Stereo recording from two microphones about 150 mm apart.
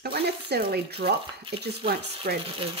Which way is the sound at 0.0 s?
90° right.